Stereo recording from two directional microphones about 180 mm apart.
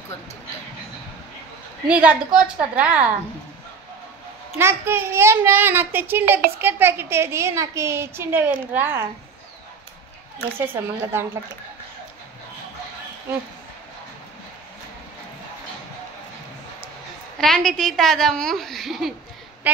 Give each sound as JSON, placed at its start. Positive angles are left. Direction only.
{"t": 1.9, "sound": "a woman's voice", "side_deg": -5}
{"t": 4.6, "sound": "a woman's voice", "side_deg": -15}
{"t": 10.6, "sound": "a woman's voice", "side_deg": -15}
{"t": 17.4, "sound": "a child's voice", "side_deg": 0}